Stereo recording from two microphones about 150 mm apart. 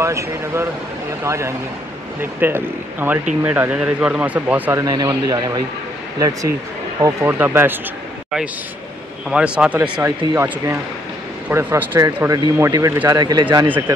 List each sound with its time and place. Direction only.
0.0 s speech: 20° right (ahead or behind)
4.8 s speech: 25° right (ahead or behind)
9.3 s speech: 5° right (ahead or behind); by 13.7 s 25° right (ahead or behind)
13.7 s speech: 15° right (ahead or behind)